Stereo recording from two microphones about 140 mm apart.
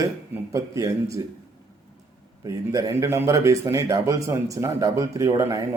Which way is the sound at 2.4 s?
25° right (ahead or behind).